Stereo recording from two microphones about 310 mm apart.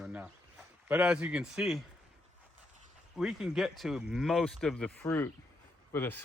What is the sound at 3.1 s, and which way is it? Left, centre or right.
Speech, centre.